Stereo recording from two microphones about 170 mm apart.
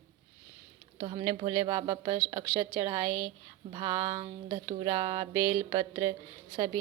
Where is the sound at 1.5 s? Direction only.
20° right (ahead or behind).